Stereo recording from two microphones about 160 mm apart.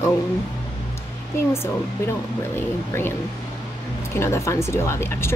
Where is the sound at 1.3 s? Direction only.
15° left (ahead or behind).